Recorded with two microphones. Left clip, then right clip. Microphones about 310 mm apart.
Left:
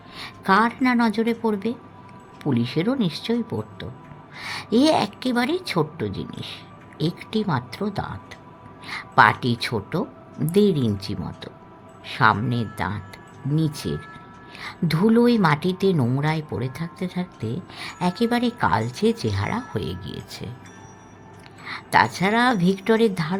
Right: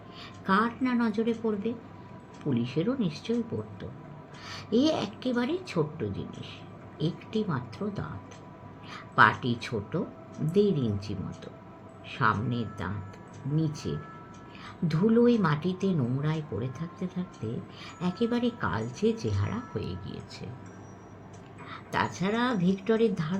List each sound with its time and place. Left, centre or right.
0.4 s speech: left
4.4 s speech: left
21.7 s speech: left